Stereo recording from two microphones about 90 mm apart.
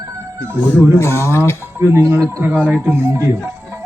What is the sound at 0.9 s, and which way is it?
Speech, 30° left (ahead or behind).